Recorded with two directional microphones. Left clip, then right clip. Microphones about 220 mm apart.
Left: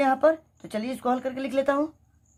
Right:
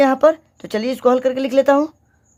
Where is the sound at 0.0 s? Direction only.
45° right (ahead or behind).